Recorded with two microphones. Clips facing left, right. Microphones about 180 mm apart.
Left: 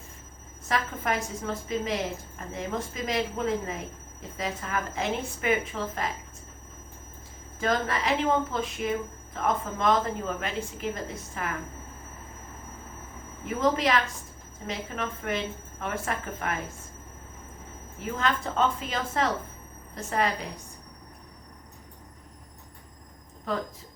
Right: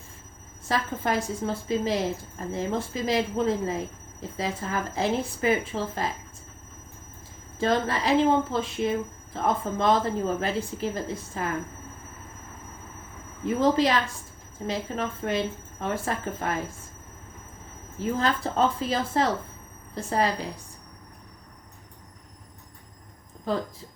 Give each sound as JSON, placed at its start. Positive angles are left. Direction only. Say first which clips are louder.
{"t": 0.7, "sound": "a woman's voice", "louder": "right 2 dB", "side_deg": -30}
{"t": 7.6, "sound": "a woman's voice", "louder": "right 3 dB", "side_deg": -30}
{"t": 13.4, "sound": "a woman's voice", "louder": "right 4 dB", "side_deg": -30}
{"t": 18.0, "sound": "a woman's voice", "louder": "right 3 dB", "side_deg": -35}
{"t": 23.5, "sound": "a woman's voice", "louder": "right 3 dB", "side_deg": -30}